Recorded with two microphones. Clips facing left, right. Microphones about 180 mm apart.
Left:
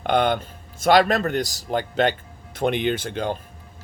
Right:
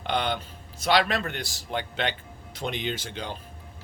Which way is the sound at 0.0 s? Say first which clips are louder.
Left 7 dB; 50° left (ahead or behind).